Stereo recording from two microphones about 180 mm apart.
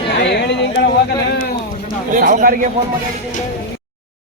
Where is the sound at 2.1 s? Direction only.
45° right (ahead or behind).